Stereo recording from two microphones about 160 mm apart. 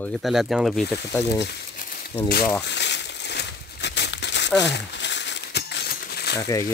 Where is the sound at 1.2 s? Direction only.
90° left; by 2.1 s 60° left (ahead or behind).